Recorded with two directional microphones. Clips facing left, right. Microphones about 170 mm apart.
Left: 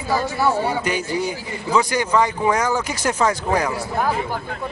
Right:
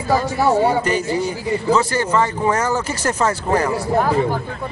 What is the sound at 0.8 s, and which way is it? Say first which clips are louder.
A man's voice: right 3 dB; 10° left (ahead or behind).